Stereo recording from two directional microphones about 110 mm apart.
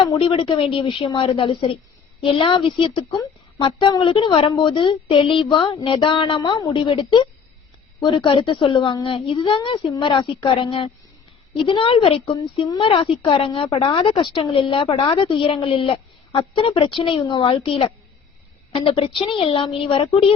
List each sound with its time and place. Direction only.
0.2 s a woman's voice: 50° left (ahead or behind)
6.7 s a woman's voice: 60° left (ahead or behind)
8.0 s a woman's voice: 50° left (ahead or behind)
12.6 s speech: 40° left (ahead or behind)
12.9 s a woman's voice: 55° left (ahead or behind)